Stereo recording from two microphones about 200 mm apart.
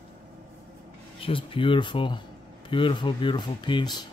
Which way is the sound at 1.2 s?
25° left (ahead or behind).